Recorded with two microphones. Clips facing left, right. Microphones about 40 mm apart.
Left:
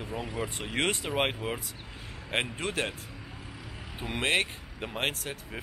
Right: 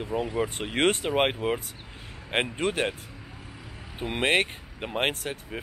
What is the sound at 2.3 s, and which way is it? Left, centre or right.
Speech, right.